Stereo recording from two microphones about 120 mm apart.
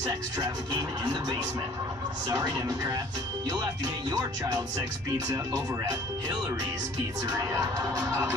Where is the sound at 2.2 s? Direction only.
35° right (ahead or behind).